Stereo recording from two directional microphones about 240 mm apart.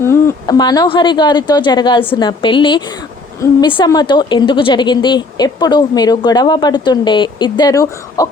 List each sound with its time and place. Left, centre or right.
0.0 s a woman's voice: centre